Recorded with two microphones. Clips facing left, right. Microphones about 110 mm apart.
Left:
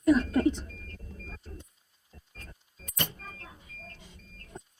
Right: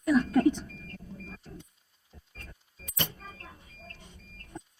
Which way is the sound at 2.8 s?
45° left (ahead or behind).